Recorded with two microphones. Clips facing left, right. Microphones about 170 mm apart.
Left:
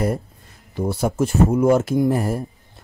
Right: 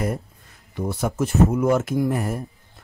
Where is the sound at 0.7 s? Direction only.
30° left (ahead or behind).